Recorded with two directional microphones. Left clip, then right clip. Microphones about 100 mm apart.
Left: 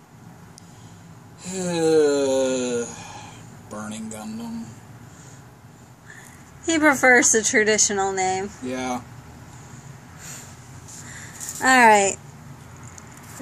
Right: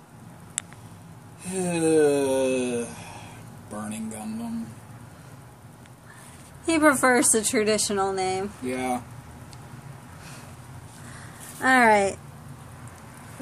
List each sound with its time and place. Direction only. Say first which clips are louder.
1.4 s snoring: left 3 dB; 20° right (ahead or behind)
3.7 s a sound: left 1 dB; 20° right (ahead or behind)
6.6 s speech: left 2 dB; centre (ahead or behind)
11.6 s speech: left 4 dB; 15° left (ahead or behind)